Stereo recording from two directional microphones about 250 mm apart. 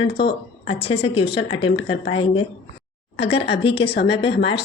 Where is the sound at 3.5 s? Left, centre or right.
Left.